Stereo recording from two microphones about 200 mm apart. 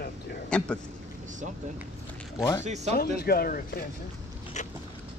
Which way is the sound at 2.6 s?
35° right (ahead or behind).